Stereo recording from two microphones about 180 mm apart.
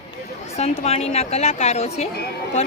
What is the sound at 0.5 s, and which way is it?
A woman's voice, 35° left (ahead or behind).